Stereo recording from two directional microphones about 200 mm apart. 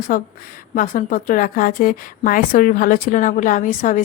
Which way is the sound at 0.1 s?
45° left (ahead or behind).